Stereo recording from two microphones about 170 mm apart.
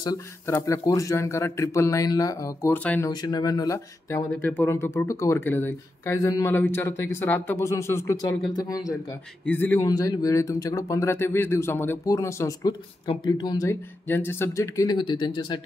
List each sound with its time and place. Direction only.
0.0 s a man's voice: 20° left (ahead or behind)
3.1 s a man's voice: 25° left (ahead or behind)
9.4 s a man's voice: 10° left (ahead or behind); by 15.6 s 25° left (ahead or behind)